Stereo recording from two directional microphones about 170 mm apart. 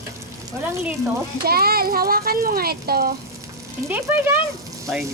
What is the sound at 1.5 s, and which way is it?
Speech, 65° right (ahead or behind).